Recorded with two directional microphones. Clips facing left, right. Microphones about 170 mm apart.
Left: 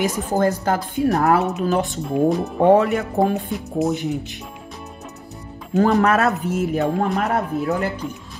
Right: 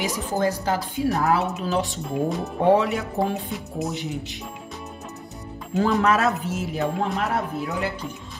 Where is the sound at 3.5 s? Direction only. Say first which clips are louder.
Left 7 dB; centre (ahead or behind).